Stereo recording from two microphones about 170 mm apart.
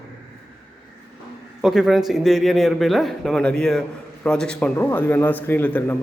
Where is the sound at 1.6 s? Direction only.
5° right (ahead or behind).